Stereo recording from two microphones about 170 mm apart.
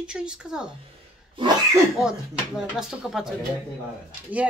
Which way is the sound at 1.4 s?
30° right (ahead or behind).